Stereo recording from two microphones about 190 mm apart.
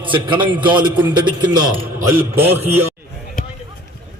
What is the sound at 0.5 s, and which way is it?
Speech, 10° right (ahead or behind).